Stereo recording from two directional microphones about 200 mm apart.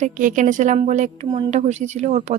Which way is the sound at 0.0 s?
40° right (ahead or behind).